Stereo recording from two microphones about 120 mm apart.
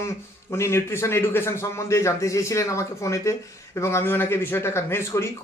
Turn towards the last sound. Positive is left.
turn(degrees=20)  # may be behind; listen again after turning